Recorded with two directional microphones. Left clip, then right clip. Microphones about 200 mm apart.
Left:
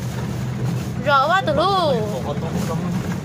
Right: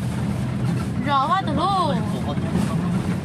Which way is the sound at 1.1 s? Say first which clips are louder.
Left 4 dB; 25° left (ahead or behind).